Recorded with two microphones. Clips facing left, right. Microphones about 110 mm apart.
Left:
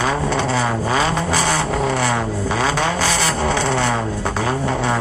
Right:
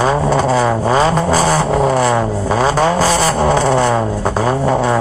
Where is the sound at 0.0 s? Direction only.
40° right (ahead or behind).